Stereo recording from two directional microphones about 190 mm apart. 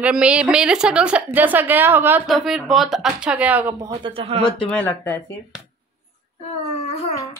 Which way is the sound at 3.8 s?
25° right (ahead or behind).